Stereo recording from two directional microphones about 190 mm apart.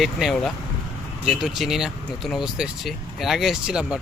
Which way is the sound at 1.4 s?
Centre (ahead or behind).